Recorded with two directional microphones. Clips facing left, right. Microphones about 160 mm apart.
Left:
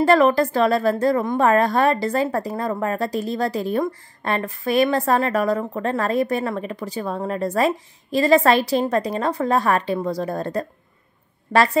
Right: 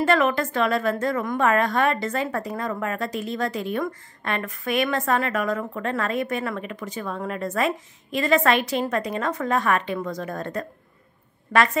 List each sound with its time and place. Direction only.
0.0 s a woman's voice: 35° left (ahead or behind)